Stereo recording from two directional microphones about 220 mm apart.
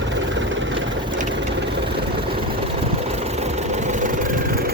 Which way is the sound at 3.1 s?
30° right (ahead or behind).